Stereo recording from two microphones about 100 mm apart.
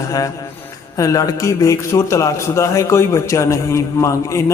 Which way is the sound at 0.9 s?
35° left (ahead or behind).